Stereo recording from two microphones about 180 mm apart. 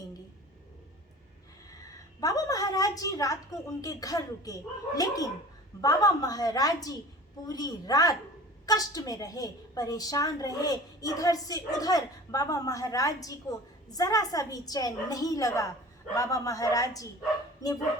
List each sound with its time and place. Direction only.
2.2 s a woman's voice: 20° left (ahead or behind)